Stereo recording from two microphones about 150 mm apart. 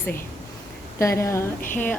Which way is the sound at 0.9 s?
20° left (ahead or behind).